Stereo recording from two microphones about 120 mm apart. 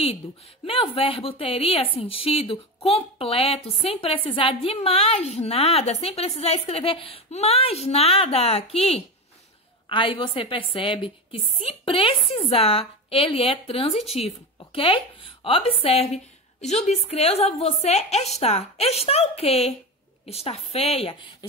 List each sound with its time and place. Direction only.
0.7 s a woman's voice: 50° left (ahead or behind)
9.8 s a woman's voice: 45° left (ahead or behind)